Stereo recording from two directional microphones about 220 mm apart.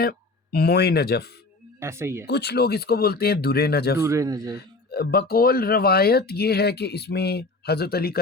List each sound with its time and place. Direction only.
0.0 s speech: 45° left (ahead or behind)
1.8 s speech: 10° right (ahead or behind)
2.2 s speech: 50° left (ahead or behind)
4.0 s speech: 15° right (ahead or behind)
4.5 s speech: 45° left (ahead or behind)